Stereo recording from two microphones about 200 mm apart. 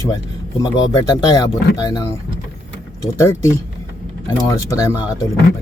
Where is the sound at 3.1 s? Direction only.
15° left (ahead or behind).